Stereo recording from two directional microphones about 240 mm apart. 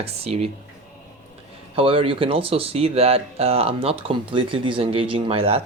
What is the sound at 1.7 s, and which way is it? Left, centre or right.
Speech, right.